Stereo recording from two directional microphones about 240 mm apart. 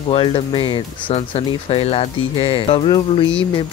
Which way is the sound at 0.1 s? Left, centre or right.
Left.